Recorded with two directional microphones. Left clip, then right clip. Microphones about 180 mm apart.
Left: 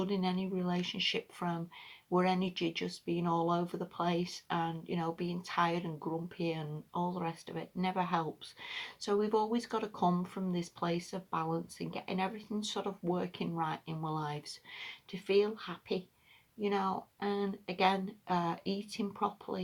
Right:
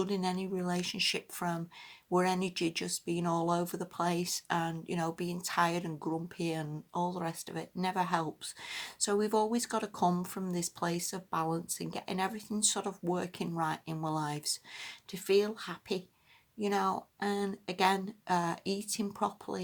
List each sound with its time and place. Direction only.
0.0 s speech: 45° right (ahead or behind)